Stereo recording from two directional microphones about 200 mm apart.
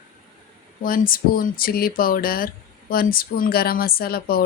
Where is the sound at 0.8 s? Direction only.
45° left (ahead or behind).